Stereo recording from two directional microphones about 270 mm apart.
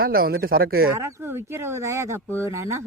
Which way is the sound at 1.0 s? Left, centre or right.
Centre.